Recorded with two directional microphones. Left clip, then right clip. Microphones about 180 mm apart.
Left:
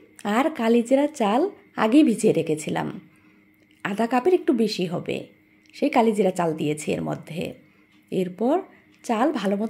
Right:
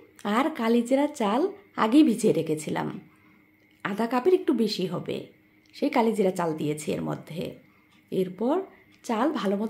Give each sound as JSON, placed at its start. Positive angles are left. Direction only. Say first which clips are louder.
{"t": 0.2, "sound": "a woman's voice", "louder": "left 3 dB", "side_deg": 15}